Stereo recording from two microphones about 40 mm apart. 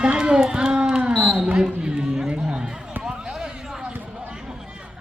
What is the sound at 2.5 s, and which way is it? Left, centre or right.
Run, centre.